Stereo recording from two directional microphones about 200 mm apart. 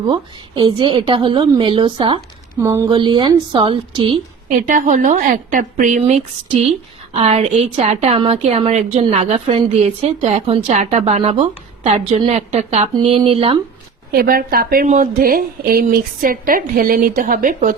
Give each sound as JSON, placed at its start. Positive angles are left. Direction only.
{"t": 0.1, "sound": "a woman's voice", "side_deg": -25}
{"t": 4.4, "sound": "speech", "side_deg": -40}
{"t": 14.1, "sound": "speech", "side_deg": -50}